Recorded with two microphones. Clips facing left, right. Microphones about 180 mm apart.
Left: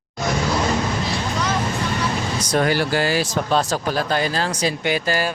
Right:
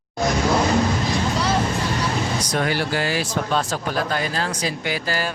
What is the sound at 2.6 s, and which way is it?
Speech, 40° left (ahead or behind).